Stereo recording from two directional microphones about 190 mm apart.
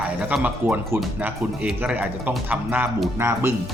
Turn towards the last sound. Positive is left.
turn(degrees=-15)  # may be behind; listen again after turning